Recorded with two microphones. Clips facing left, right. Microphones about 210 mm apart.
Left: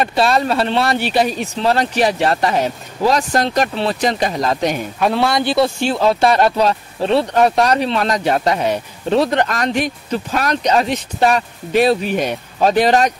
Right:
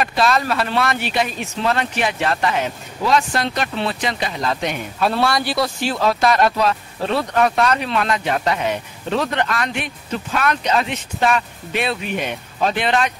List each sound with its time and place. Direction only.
0.0 s speech: 30° left (ahead or behind)
5.0 s speech: 10° left (ahead or behind)
5.3 s speech: 25° left (ahead or behind); by 13.1 s 40° left (ahead or behind)